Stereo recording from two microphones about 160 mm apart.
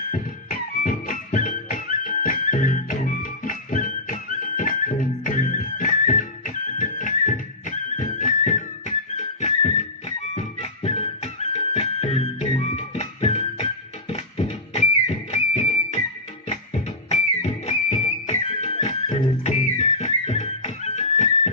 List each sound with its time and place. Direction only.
0.1 s music: 60° left (ahead or behind)